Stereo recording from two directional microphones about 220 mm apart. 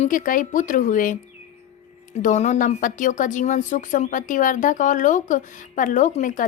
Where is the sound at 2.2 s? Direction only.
35° left (ahead or behind).